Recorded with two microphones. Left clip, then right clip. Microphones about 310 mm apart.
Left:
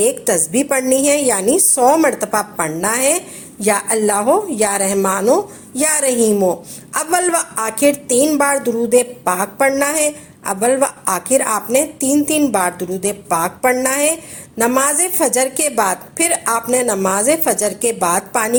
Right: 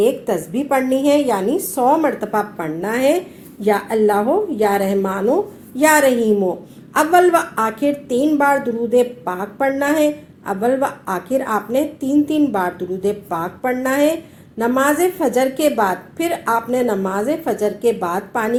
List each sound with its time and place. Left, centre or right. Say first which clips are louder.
0.0 s a woman's voice: left 1 dB; left